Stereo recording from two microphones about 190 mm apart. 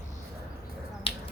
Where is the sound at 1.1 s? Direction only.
30° left (ahead or behind).